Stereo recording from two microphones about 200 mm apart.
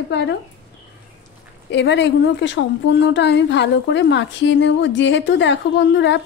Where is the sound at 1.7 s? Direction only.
60° left (ahead or behind).